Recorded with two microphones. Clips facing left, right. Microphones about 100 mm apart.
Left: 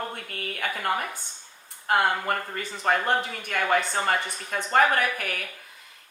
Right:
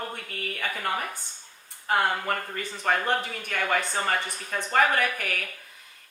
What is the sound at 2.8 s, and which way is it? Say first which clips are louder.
A woman's voice: left 2 dB; 30° left (ahead or behind).